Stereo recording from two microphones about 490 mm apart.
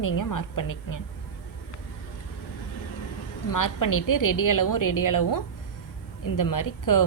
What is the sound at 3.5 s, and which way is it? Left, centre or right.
A woman's voice, left.